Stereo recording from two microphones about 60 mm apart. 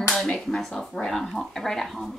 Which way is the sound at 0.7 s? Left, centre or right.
Centre.